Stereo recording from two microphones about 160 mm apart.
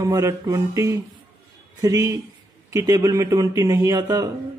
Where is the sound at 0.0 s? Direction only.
20° right (ahead or behind).